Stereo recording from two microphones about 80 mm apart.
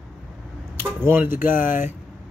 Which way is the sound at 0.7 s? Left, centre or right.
Right.